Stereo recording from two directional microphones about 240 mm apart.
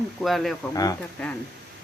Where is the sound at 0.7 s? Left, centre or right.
Centre.